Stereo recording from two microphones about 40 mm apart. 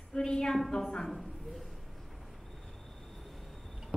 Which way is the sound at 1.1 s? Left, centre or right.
Centre.